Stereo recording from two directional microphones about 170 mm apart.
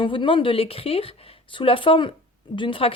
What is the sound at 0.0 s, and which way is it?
A woman's voice, 30° left (ahead or behind).